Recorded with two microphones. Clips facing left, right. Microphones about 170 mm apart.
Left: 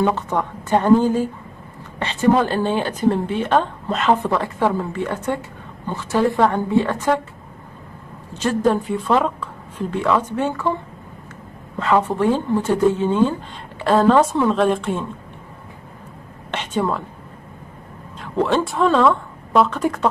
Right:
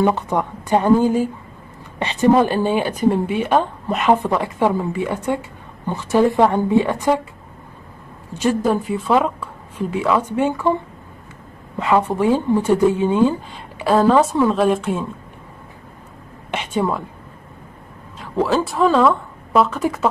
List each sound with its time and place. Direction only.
0.0 s a woman's voice: 15° right (ahead or behind)
8.3 s a woman's voice: 10° right (ahead or behind)
11.8 s a woman's voice: 10° right (ahead or behind)
16.4 s a woman's voice: 10° right (ahead or behind)
18.2 s speech: 5° right (ahead or behind)